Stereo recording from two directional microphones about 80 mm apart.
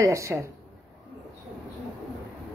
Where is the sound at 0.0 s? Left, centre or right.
Right.